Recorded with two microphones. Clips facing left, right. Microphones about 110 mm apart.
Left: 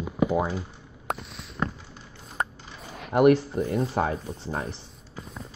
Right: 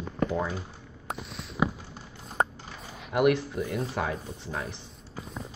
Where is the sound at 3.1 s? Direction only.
35° left (ahead or behind).